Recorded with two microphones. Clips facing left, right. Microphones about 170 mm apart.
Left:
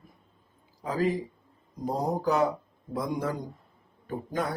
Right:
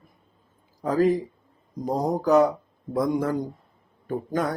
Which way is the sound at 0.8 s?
45° right (ahead or behind).